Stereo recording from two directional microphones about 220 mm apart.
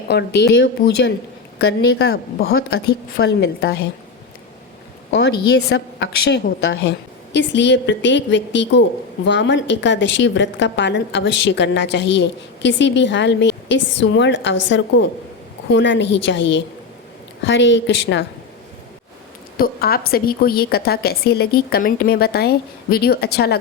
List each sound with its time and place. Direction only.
0.1 s a woman's voice: 50° left (ahead or behind)
5.1 s a woman's voice: 50° left (ahead or behind)
15.7 s a woman's voice: 55° left (ahead or behind)
19.5 s a woman's voice: 45° left (ahead or behind)